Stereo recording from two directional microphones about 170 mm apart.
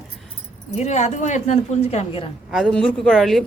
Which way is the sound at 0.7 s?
40° left (ahead or behind).